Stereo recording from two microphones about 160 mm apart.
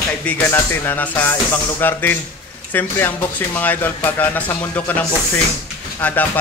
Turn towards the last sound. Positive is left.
turn(degrees=10)  # may be behind; listen again after turning